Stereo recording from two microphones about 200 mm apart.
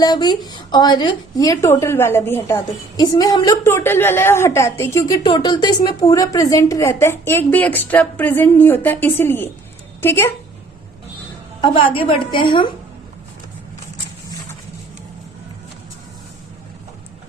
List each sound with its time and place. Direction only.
0.0 s a woman's voice: 20° left (ahead or behind)
11.6 s a woman's voice: 25° left (ahead or behind)